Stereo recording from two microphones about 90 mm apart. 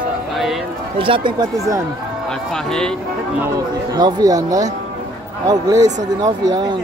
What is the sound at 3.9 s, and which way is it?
Speech, 50° right (ahead or behind).